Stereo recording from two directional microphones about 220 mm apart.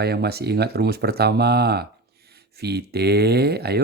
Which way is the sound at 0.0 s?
45° right (ahead or behind).